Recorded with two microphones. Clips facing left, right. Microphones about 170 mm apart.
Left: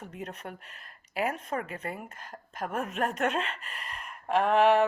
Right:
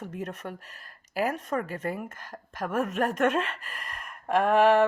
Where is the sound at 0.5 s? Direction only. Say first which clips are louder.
Right 3 dB; 40° right (ahead or behind).